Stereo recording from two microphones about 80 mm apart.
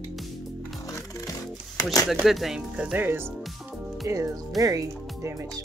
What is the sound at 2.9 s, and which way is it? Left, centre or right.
Speech, right.